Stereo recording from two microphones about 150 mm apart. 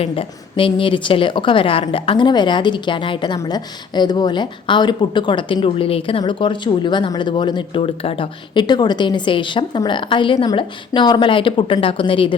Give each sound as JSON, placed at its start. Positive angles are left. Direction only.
{"t": 0.0, "sound": "a woman's voice", "side_deg": 35}